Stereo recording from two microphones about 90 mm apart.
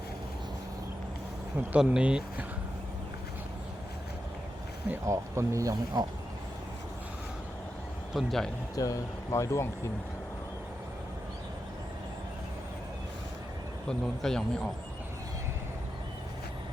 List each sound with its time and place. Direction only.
1.8 s speech: 10° right (ahead or behind)
5.0 s speech: 35° right (ahead or behind)
8.1 s speech: 5° left (ahead or behind)
8.7 s speech: 40° left (ahead or behind)
13.8 s speech: 5° left (ahead or behind)